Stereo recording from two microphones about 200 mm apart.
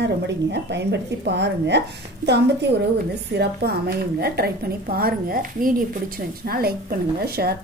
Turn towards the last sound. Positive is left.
turn(degrees=-50)  # may be behind; listen again after turning